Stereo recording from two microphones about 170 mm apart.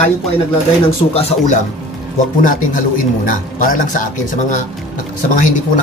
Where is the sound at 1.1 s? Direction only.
40° left (ahead or behind).